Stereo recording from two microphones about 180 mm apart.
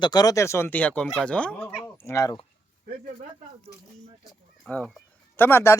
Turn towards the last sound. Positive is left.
turn(degrees=15)  # may be behind; listen again after turning